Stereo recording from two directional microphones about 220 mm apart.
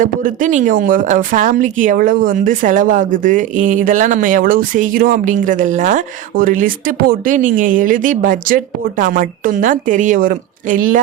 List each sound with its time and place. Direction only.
0.0 s a woman's voice: 35° right (ahead or behind)